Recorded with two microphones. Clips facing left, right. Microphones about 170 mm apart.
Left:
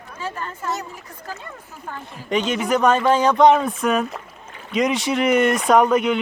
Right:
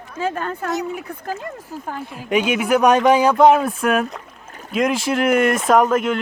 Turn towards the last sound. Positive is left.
turn(degrees=0)  # may be behind; listen again after turning